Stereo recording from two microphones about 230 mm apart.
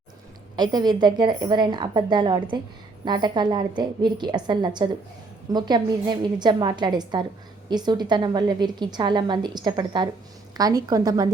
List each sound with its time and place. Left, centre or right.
0.5 s a woman's voice: centre